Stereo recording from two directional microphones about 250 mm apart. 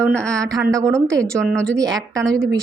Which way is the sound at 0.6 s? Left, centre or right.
Centre.